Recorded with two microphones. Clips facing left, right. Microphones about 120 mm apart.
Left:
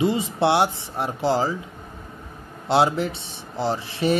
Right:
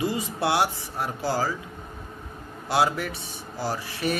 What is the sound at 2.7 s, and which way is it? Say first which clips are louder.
A man's voice: left 4 dB; 25° left (ahead or behind).